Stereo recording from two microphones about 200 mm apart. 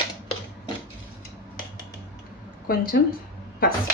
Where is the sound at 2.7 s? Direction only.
45° left (ahead or behind).